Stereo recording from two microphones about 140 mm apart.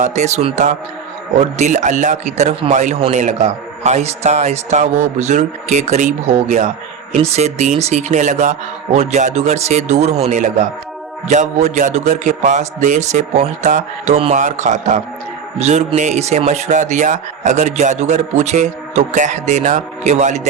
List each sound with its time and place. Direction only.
0.0 s a man's voice: 55° right (ahead or behind)